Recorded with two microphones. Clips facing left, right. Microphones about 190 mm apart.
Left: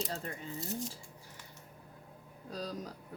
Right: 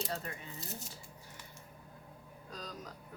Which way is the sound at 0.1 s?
30° left (ahead or behind).